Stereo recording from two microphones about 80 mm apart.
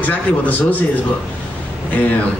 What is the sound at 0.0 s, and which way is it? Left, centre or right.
Speech, centre.